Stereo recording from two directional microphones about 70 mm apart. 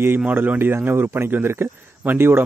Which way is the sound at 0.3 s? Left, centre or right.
Right.